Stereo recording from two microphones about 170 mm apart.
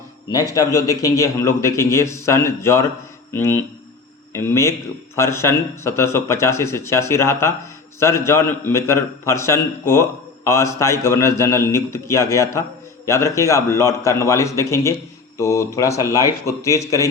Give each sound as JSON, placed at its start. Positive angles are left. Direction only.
{"t": 0.3, "sound": "a man's voice", "side_deg": 20}